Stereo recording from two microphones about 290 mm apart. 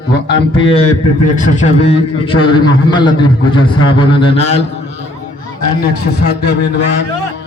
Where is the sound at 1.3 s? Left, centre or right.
Left.